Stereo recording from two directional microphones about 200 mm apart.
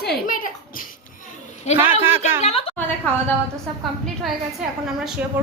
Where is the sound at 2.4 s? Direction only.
30° left (ahead or behind).